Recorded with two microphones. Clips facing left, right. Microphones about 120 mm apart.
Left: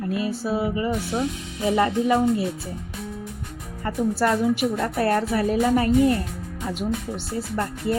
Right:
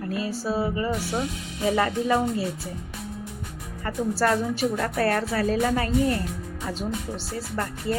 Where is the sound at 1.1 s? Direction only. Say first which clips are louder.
Left 4 dB; 5° right (ahead or behind).